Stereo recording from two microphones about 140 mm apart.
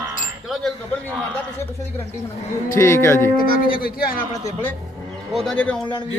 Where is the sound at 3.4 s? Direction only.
90° left.